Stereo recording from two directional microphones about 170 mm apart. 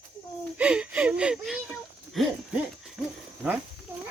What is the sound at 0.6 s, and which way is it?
Speech, 5° right (ahead or behind).